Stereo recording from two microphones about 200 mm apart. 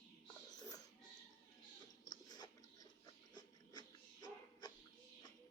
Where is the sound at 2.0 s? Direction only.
20° left (ahead or behind).